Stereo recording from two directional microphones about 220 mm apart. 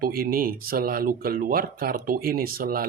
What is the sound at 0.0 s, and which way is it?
Speech, 40° right (ahead or behind).